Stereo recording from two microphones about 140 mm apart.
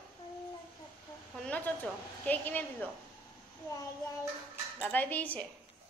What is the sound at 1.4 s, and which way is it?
A woman's voice, 10° left (ahead or behind).